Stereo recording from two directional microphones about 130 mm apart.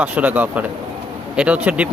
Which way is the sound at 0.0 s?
10° right (ahead or behind).